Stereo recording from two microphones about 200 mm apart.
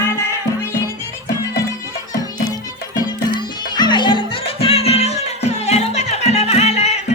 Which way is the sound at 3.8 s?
20° left (ahead or behind).